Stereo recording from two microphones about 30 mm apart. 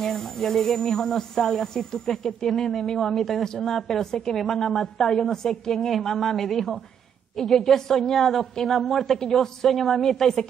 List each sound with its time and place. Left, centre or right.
0.0 s a woman's voice: centre
3.4 s a woman's voice: centre
9.2 s speech: centre
9.8 s speech: centre